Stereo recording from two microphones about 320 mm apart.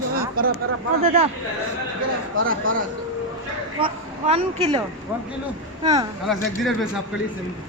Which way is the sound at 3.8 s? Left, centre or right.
Centre.